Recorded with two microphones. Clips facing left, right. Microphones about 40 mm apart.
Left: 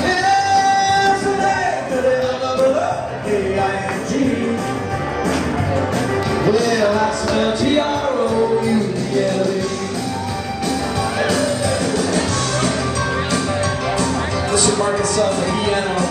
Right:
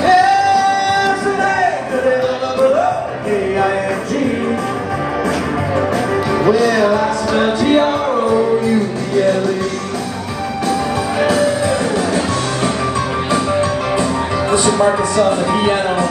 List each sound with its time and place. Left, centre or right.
0.0 s music: centre
6.4 s music: centre
11.1 s music: centre
13.3 s music: centre
14.5 s speech: centre